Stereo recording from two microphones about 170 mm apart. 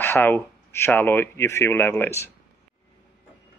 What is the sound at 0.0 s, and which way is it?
Speech, 15° left (ahead or behind).